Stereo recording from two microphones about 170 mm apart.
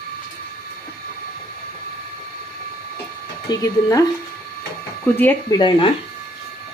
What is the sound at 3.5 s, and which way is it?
Speech, 20° left (ahead or behind).